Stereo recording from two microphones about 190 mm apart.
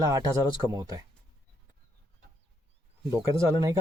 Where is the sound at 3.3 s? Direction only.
15° right (ahead or behind).